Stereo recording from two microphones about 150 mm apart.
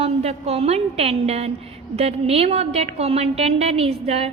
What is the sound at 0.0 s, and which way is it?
A woman's voice, 45° right (ahead or behind).